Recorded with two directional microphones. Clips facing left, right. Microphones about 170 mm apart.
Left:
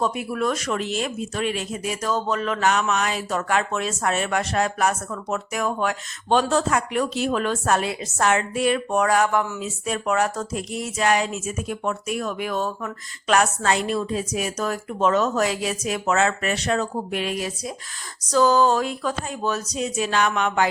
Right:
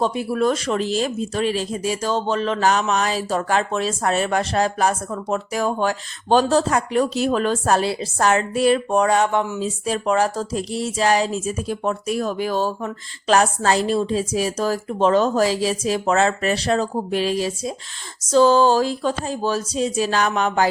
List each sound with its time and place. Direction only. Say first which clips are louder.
0.0 s speech: right 4 dB; 30° right (ahead or behind)